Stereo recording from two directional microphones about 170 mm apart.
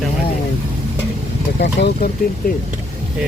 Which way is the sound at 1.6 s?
80° left.